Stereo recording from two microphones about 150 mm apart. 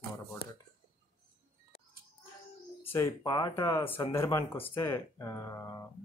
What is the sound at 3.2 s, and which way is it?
Speech, 25° left (ahead or behind).